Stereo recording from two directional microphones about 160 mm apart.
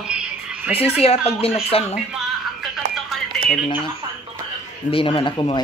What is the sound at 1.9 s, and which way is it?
Music, centre (ahead or behind).